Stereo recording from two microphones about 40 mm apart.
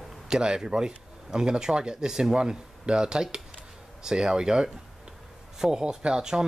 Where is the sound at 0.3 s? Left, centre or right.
Centre.